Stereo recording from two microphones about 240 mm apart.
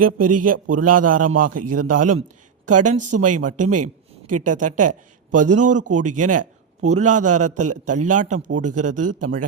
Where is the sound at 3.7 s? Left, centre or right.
Right.